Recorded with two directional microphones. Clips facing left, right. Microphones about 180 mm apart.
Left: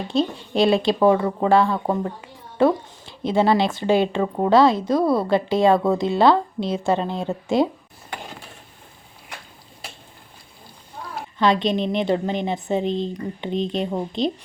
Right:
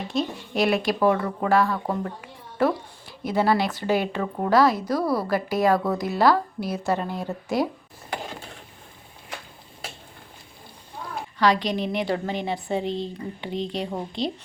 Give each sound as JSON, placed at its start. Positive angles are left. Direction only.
{"t": 0.1, "sound": "speech", "side_deg": 30}
{"t": 11.3, "sound": "speech", "side_deg": 25}